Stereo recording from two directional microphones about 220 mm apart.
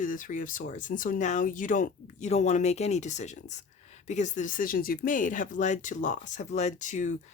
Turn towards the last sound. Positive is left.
turn(degrees=35)  # may be behind; listen again after turning